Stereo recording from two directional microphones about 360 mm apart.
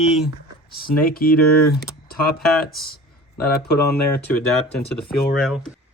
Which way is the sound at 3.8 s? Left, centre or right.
Left.